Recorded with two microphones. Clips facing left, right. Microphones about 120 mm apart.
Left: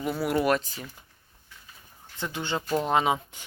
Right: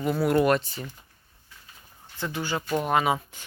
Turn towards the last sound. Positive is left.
turn(degrees=20)  # may be behind; listen again after turning